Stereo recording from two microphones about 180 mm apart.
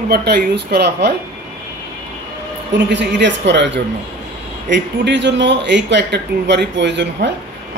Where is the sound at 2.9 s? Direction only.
75° right (ahead or behind).